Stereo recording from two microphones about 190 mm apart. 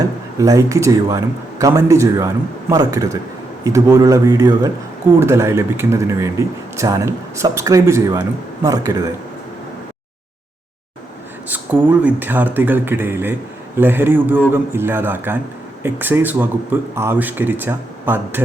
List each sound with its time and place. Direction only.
0.3 s speech: 15° right (ahead or behind)
11.4 s speech: 10° right (ahead or behind)